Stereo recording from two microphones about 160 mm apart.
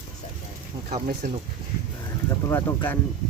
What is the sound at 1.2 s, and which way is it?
Speech, 50° right (ahead or behind).